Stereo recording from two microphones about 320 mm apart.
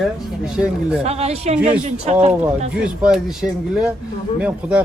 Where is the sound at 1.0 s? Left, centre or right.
Centre.